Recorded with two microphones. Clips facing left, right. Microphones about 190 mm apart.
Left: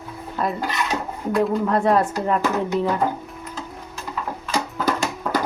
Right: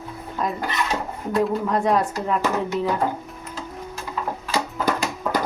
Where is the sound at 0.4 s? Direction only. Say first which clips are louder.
Left 2 dB; 5° left (ahead or behind).